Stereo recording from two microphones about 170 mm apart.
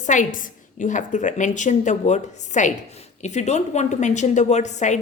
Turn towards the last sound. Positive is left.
turn(degrees=45)  # may be behind; listen again after turning